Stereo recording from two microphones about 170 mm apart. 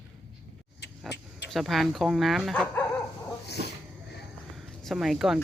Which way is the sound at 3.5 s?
75° left (ahead or behind).